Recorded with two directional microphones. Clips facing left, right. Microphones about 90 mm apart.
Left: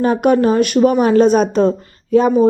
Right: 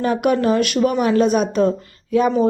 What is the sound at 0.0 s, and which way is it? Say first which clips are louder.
A woman's voice: left 4 dB; 35° left (ahead or behind).